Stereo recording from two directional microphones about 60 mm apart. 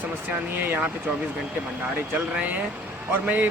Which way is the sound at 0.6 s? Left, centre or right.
Right.